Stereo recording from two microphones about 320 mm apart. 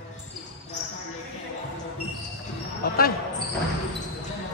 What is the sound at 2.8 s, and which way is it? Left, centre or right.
Speech, left.